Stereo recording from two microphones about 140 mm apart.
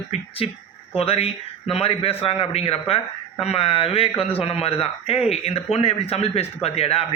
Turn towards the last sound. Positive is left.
turn(degrees=45)  # may be behind; listen again after turning